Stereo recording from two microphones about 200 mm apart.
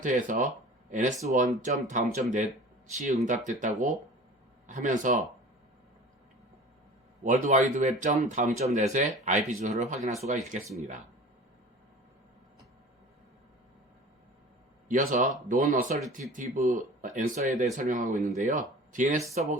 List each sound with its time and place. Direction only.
0.0 s speech: 40° right (ahead or behind)
7.3 s speech: 35° right (ahead or behind)
14.8 s speech: 40° right (ahead or behind)